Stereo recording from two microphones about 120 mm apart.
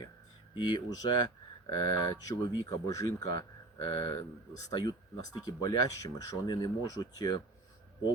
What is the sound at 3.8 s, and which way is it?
Speech, 40° left (ahead or behind).